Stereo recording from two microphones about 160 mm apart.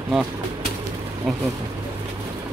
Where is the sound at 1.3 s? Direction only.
Centre (ahead or behind).